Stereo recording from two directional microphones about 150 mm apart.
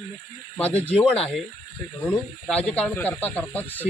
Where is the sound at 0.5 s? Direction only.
10° left (ahead or behind).